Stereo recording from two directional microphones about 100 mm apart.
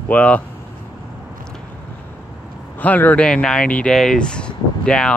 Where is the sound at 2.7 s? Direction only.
15° left (ahead or behind).